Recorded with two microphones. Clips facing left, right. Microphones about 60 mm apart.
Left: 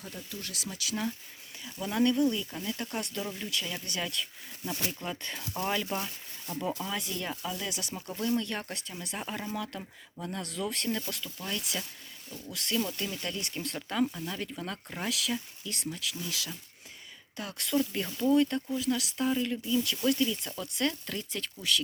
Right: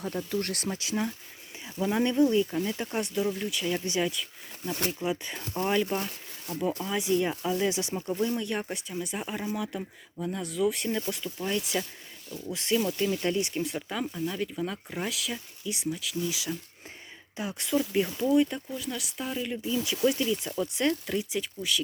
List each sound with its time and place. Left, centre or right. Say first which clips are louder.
0.0 s speech: right 11 dB; right
0.7 s speech: left 1 dB; right
3.2 s speech: right 6 dB; centre
3.7 s speech: right 8 dB; centre
4.1 s speech: even; centre
6.5 s speech: right 4 dB; centre
10.8 s speech: right 3 dB; centre